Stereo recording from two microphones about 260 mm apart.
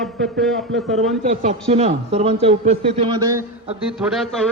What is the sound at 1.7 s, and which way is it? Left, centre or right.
A man's voice, right.